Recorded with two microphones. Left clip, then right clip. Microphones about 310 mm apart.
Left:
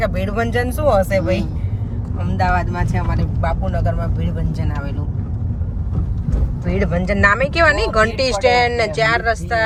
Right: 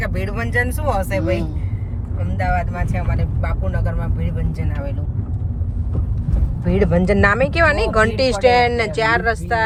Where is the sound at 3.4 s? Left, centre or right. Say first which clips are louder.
Left 8 dB; centre.